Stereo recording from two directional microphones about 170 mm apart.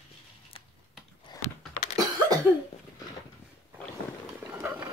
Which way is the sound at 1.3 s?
25° left (ahead or behind).